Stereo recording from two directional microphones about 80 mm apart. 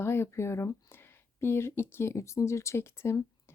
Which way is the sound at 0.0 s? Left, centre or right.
Left.